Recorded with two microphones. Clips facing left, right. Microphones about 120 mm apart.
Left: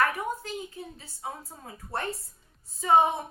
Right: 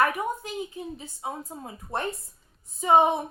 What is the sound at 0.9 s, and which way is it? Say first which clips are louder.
Speech: right 4 dB; 20° right (ahead or behind).